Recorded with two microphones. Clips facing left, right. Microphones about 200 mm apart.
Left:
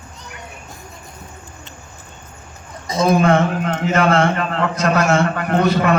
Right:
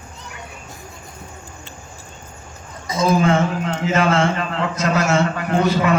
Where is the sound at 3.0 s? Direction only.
60° left (ahead or behind).